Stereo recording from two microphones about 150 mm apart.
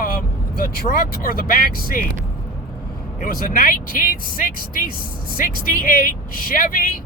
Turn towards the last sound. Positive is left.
turn(degrees=70)  # may be behind; listen again after turning